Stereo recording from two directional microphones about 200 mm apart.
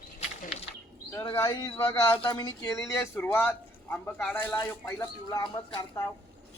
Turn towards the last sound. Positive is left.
turn(degrees=20)  # may be behind; listen again after turning